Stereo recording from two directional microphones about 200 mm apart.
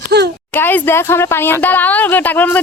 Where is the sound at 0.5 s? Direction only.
10° left (ahead or behind).